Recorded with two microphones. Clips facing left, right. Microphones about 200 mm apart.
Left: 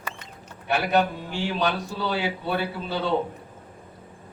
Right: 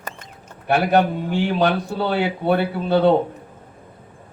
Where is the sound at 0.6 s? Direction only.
60° right (ahead or behind).